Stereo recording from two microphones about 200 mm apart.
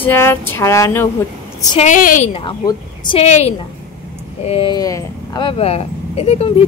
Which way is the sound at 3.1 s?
35° left (ahead or behind).